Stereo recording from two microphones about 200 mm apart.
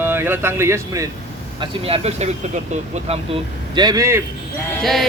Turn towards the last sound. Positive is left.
turn(degrees=0)  # may be behind; listen again after turning